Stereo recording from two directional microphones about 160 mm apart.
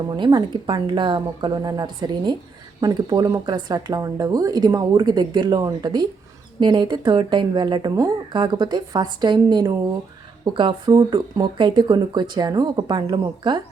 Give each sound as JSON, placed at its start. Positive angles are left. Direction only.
{"t": 0.2, "sound": "speech", "side_deg": -25}